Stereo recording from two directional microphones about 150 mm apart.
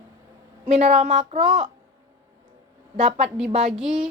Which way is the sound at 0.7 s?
45° right (ahead or behind).